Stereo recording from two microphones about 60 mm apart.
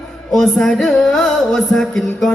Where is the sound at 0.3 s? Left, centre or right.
Centre.